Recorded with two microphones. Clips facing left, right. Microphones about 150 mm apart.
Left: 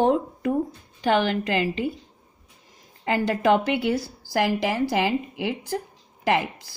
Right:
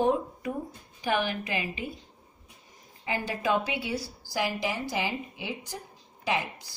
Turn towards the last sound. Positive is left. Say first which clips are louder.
# left 7 dB
turn(degrees=70)  # may be behind; listen again after turning